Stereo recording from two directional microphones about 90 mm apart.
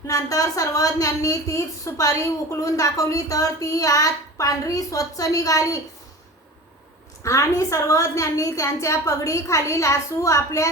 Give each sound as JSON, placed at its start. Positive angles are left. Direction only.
{"t": 0.1, "sound": "a woman's voice", "side_deg": 40}
{"t": 7.2, "sound": "a woman's voice", "side_deg": 35}